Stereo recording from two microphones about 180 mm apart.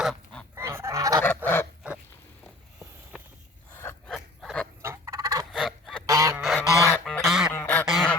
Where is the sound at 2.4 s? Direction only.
5° right (ahead or behind).